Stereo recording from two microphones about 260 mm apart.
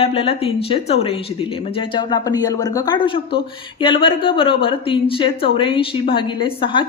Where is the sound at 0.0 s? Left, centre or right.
Left.